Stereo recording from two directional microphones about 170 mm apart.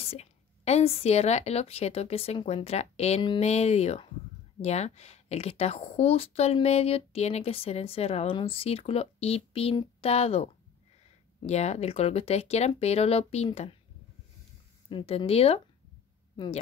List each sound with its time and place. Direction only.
0.0 s speech: 40° left (ahead or behind)
14.9 s speech: 30° left (ahead or behind)